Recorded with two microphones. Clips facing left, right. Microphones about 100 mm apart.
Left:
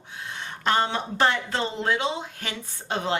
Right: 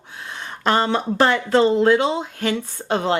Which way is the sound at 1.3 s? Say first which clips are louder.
Right 11 dB; 60° right (ahead or behind).